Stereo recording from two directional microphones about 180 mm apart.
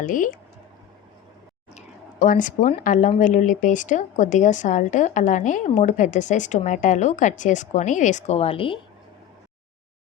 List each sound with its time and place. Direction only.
0.0 s speech: 45° left (ahead or behind)
2.2 s speech: 50° left (ahead or behind); by 8.8 s 30° left (ahead or behind)